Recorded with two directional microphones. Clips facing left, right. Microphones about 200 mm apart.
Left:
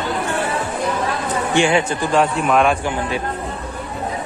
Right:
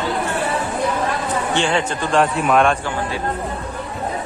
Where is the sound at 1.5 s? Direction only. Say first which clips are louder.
Left 5 dB; 10° left (ahead or behind).